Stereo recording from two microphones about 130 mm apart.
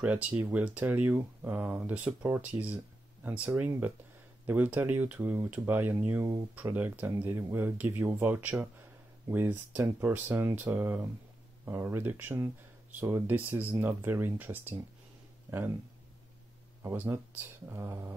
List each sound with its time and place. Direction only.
0.0 s speech: 10° right (ahead or behind)
16.8 s speech: 15° right (ahead or behind)